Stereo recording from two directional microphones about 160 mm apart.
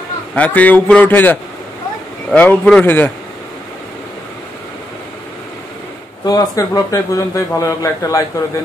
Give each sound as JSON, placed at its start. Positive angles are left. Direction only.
{"t": 0.3, "sound": "a man's voice", "side_deg": 10}
{"t": 6.2, "sound": "a man's voice", "side_deg": 25}